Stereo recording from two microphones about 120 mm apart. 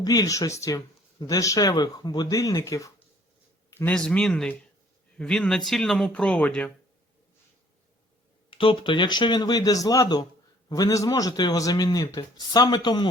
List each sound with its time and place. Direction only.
0.0 s speech: 30° left (ahead or behind)
3.7 s a sound: 20° left (ahead or behind)
3.9 s speech: 5° left (ahead or behind)
8.4 s speech: 45° left (ahead or behind)